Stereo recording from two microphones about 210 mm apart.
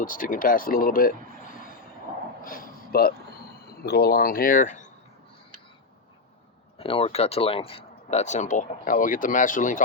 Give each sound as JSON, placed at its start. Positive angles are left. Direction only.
{"t": 0.0, "sound": "speech", "side_deg": 40}
{"t": 2.4, "sound": "a sound", "side_deg": 40}
{"t": 3.8, "sound": "speech", "side_deg": 45}
{"t": 6.7, "sound": "speech", "side_deg": 25}